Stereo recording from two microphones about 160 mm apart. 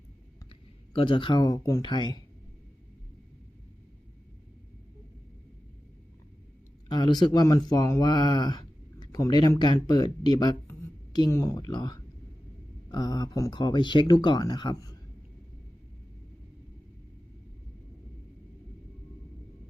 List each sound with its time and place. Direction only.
0.9 s speech: 35° left (ahead or behind)
6.8 s speech: 25° left (ahead or behind)
10.7 s a sound: 20° left (ahead or behind)
12.9 s speech: 25° left (ahead or behind)